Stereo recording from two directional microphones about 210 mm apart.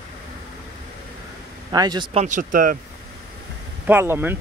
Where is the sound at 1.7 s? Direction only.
20° right (ahead or behind); by 2.7 s 40° right (ahead or behind).